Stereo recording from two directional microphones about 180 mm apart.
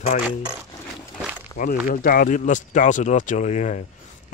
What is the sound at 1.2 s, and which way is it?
Rowboat, 10° right (ahead or behind).